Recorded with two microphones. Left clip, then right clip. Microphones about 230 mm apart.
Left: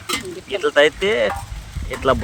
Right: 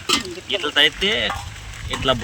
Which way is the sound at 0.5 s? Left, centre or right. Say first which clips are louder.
Left 2 dB; centre.